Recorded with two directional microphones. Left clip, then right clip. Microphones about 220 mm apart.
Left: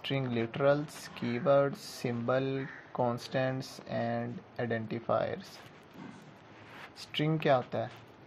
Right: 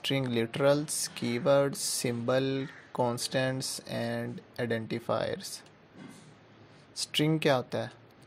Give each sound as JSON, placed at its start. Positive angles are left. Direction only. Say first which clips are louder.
{"t": 0.0, "sound": "speech", "louder": "right 4 dB", "side_deg": -55}
{"t": 7.0, "sound": "speech", "louder": "right 5 dB", "side_deg": -55}